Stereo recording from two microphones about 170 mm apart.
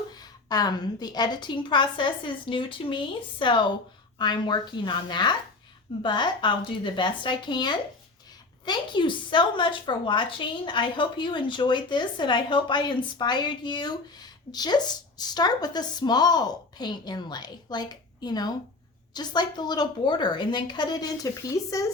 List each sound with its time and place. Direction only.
0.1 s a woman's voice: 25° left (ahead or behind)